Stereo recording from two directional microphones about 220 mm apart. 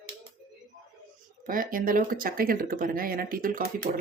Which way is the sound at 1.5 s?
40° right (ahead or behind).